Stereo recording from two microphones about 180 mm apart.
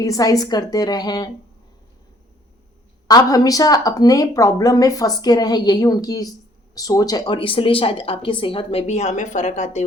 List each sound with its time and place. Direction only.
0.0 s a woman's voice: 20° left (ahead or behind)
3.1 s a woman's voice: 20° left (ahead or behind); by 9.8 s 40° left (ahead or behind)